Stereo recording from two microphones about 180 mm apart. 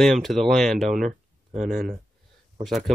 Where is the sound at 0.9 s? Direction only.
40° right (ahead or behind).